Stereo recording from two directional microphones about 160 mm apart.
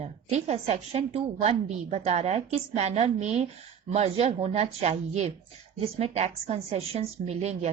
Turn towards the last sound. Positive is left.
turn(degrees=-45)  # may be behind; listen again after turning